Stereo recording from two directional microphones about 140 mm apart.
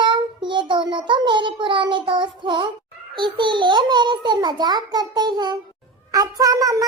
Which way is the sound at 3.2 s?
35° right (ahead or behind).